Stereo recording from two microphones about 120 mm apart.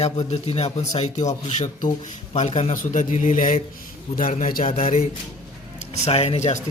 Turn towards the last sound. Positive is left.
turn(degrees=65)  # may be behind; listen again after turning